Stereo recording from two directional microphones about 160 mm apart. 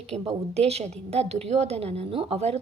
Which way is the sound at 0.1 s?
40° right (ahead or behind).